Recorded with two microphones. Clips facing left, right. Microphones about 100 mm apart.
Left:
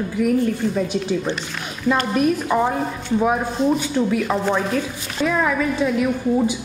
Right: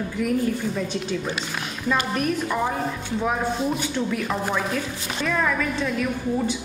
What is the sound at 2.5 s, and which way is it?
Speech, 20° left (ahead or behind).